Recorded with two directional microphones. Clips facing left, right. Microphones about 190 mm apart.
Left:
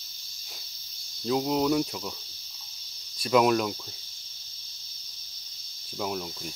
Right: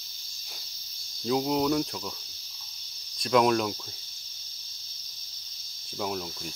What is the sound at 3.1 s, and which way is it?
Cricket, 5° left (ahead or behind).